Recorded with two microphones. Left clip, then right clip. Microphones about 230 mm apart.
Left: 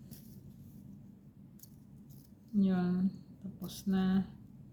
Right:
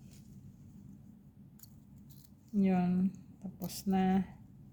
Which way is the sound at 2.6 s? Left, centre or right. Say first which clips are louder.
Right 1 dB; right.